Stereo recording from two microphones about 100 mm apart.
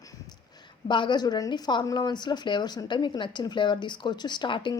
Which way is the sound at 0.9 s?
50° left (ahead or behind).